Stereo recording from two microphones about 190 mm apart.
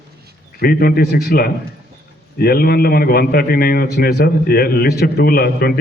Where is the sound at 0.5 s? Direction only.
55° left (ahead or behind).